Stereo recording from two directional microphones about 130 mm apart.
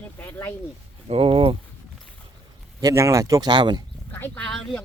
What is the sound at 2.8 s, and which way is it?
Speech, 25° right (ahead or behind).